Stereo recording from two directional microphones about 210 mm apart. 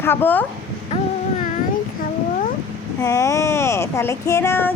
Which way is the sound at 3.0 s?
15° left (ahead or behind).